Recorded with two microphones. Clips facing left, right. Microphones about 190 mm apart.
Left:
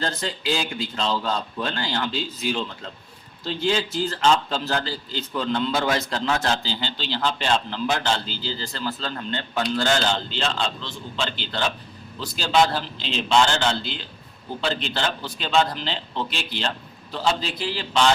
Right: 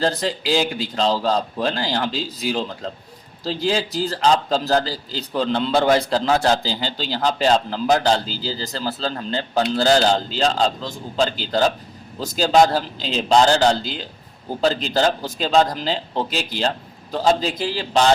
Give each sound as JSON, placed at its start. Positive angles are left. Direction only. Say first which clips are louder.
{"t": 0.0, "sound": "a man's voice", "louder": "right 6 dB", "side_deg": -35}